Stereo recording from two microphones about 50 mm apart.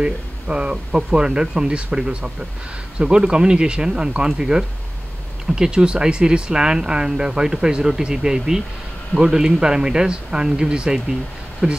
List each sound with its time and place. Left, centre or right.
0.0 s speech: centre